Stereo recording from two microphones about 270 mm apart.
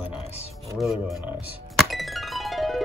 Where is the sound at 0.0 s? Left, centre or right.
Left.